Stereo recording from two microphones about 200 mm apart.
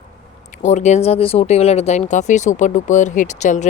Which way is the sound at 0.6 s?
35° left (ahead or behind).